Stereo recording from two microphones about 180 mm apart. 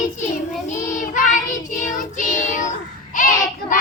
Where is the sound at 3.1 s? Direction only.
50° left (ahead or behind).